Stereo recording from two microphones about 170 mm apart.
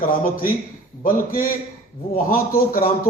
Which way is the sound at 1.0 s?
55° left (ahead or behind).